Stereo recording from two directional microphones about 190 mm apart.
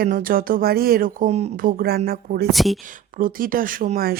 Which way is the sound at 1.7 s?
50° right (ahead or behind).